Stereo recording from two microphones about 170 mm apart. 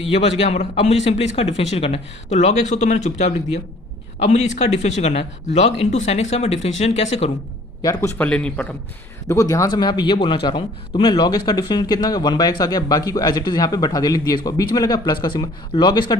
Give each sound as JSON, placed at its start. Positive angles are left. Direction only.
{"t": 0.0, "sound": "speech", "side_deg": 35}
{"t": 7.8, "sound": "a man's voice", "side_deg": 20}
{"t": 8.2, "sound": "speech", "side_deg": 10}
{"t": 9.2, "sound": "a man's voice", "side_deg": 20}